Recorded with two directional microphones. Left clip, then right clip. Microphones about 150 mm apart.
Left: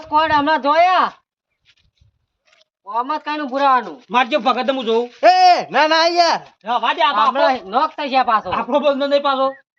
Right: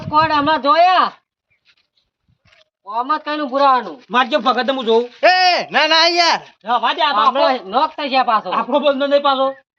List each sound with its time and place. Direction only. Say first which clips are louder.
0.1 s speech: right 1 dB; 5° right (ahead or behind)
2.8 s speech: right 2 dB; centre (ahead or behind)
4.0 s speech: right 1 dB; 30° left (ahead or behind)
5.6 s speech: right 1 dB; 90° left; by 6.4 s 65° left (ahead or behind)
6.6 s speech: left 1 dB; 15° left (ahead or behind)
7.3 s speech: right 1 dB; 20° right (ahead or behind)